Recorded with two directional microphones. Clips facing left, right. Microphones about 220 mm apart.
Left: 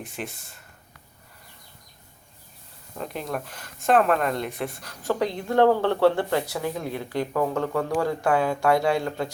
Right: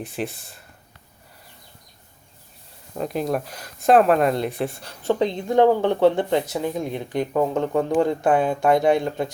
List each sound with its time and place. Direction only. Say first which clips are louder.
0.0 s speech: right 6 dB; 35° right (ahead or behind)
2.9 s speech: right 7 dB; 40° right (ahead or behind); by 9.3 s 20° right (ahead or behind)